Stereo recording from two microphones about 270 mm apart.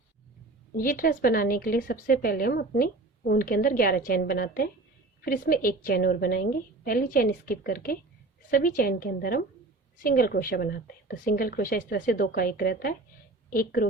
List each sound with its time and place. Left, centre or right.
0.8 s a woman's voice: left